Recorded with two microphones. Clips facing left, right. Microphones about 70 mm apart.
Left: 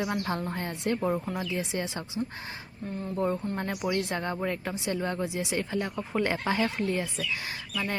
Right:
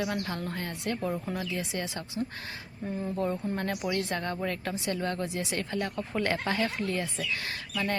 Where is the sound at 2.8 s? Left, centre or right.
Centre.